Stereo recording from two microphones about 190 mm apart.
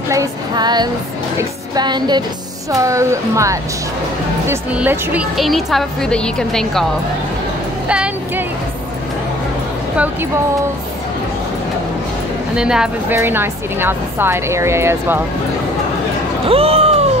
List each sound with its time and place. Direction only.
0.1 s music: 20° right (ahead or behind)
2.7 s a woman's voice: 15° right (ahead or behind); by 6.9 s centre (ahead or behind)
7.9 s speech: 5° right (ahead or behind)
12.5 s a woman's voice: 5° right (ahead or behind)
16.4 s a sound: 30° right (ahead or behind)